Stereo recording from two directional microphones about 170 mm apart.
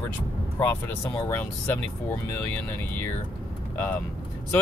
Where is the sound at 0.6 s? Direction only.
15° left (ahead or behind).